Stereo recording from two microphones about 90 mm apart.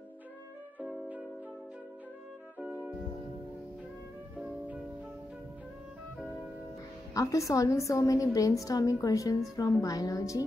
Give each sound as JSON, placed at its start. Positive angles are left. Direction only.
{"t": 2.6, "sound": "music", "side_deg": -15}
{"t": 7.2, "sound": "a woman's voice", "side_deg": 35}